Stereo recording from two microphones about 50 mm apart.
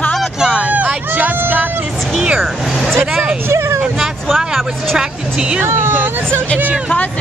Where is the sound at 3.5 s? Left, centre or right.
Right.